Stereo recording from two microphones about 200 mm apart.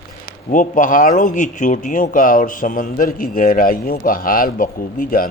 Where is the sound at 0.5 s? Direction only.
40° left (ahead or behind).